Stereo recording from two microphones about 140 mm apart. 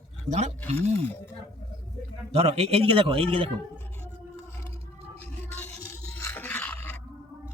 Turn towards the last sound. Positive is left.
turn(degrees=10)  # may be behind; listen again after turning